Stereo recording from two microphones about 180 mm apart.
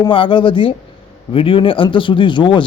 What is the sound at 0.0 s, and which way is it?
A man's voice, 25° left (ahead or behind).